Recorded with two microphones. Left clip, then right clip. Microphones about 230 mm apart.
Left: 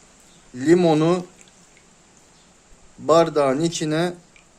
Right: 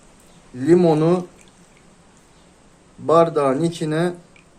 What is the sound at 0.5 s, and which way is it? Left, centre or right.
Speech, left.